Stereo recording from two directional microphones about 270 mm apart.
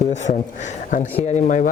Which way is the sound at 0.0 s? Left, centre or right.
Left.